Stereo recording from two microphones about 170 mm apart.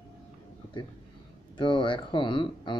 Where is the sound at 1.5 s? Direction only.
30° left (ahead or behind).